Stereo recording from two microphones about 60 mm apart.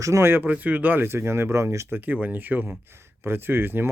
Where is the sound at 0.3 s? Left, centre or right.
Right.